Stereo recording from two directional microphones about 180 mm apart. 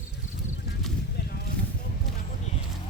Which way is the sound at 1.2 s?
65° left (ahead or behind).